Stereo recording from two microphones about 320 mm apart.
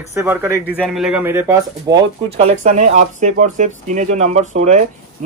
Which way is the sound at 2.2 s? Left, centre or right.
Centre.